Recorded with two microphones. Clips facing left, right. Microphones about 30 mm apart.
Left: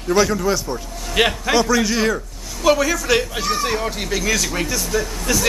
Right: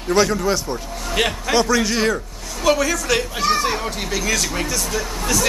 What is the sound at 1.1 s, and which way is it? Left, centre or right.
Speech, centre.